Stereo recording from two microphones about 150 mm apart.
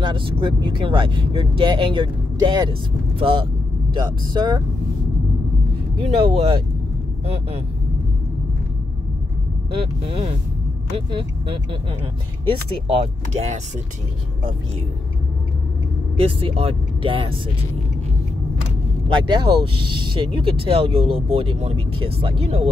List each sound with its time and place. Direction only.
0.0 s speech: 35° right (ahead or behind)
5.9 s speech: 40° right (ahead or behind)
9.7 s speech: 40° right (ahead or behind)
12.8 s speech: 45° right (ahead or behind)
16.2 s speech: 35° right (ahead or behind)
19.2 s speech: 30° right (ahead or behind)